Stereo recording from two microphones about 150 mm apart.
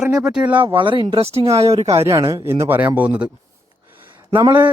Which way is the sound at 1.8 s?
20° right (ahead or behind).